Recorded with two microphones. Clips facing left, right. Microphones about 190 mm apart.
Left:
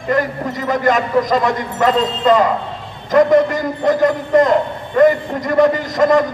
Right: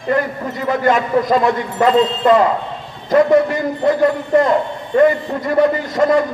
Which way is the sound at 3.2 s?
40° left (ahead or behind).